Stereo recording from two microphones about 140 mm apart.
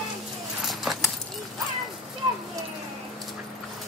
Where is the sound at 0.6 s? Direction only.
Centre (ahead or behind).